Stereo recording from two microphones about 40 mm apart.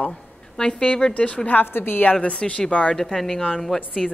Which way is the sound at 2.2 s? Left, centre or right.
Left.